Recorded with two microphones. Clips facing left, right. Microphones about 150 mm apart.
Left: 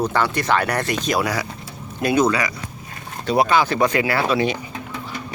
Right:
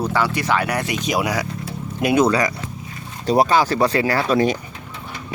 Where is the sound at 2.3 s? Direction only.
45° right (ahead or behind).